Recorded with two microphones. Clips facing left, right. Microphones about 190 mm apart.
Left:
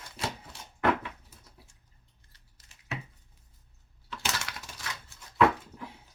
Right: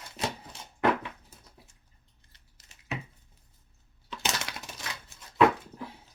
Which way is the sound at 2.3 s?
20° right (ahead or behind).